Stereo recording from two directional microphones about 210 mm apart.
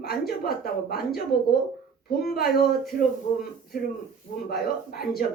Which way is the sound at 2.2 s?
45° left (ahead or behind).